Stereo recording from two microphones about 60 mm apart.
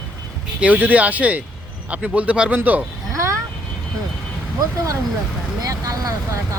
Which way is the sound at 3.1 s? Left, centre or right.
Right.